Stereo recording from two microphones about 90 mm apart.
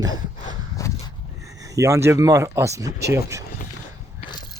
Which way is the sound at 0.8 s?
35° left (ahead or behind).